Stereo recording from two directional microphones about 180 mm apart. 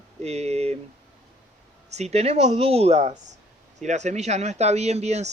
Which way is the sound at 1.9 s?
35° right (ahead or behind).